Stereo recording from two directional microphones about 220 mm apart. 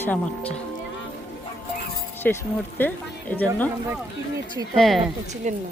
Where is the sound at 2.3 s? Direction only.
5° left (ahead or behind).